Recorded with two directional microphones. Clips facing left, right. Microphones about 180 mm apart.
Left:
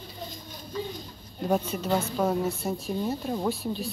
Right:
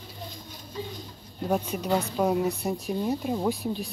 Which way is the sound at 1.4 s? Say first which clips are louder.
Left 1 dB; 10° right (ahead or behind).